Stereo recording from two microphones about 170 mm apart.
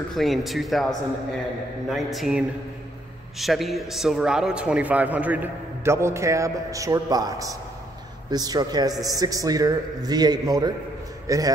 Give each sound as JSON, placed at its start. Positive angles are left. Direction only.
{"t": 0.1, "sound": "speech", "side_deg": 0}
{"t": 2.1, "sound": "a man's voice", "side_deg": 0}